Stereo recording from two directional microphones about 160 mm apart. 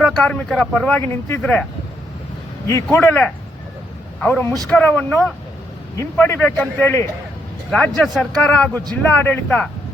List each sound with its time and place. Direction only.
0.0 s speech: 5° left (ahead or behind)
2.6 s speech: 15° left (ahead or behind)
3.0 s a man's voice: 5° left (ahead or behind)
7.7 s a man's voice: centre (ahead or behind)